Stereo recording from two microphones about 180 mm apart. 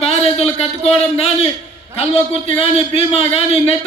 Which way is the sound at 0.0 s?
35° left (ahead or behind).